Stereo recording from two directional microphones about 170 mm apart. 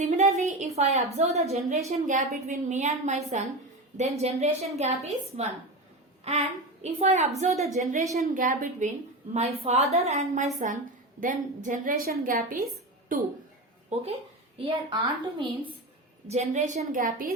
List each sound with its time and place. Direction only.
0.3 s a woman's voice: 40° right (ahead or behind)
9.3 s a woman's voice: 40° right (ahead or behind)
14.6 s a woman's voice: 25° right (ahead or behind)
16.2 s a woman's voice: 40° right (ahead or behind)